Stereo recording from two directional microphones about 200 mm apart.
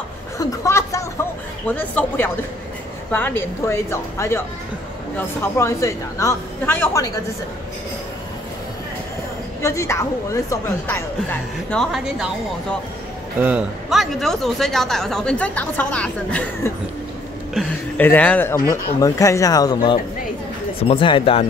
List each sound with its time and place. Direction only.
0.4 s a sound: 15° left (ahead or behind)
1.7 s a woman's voice: 10° left (ahead or behind)
9.6 s a woman's voice: 15° left (ahead or behind); by 12.3 s 5° right (ahead or behind)
13.4 s a man's voice: 5° right (ahead or behind); by 21.5 s 25° left (ahead or behind)